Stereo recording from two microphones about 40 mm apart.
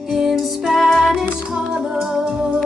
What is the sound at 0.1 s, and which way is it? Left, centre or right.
Music, centre.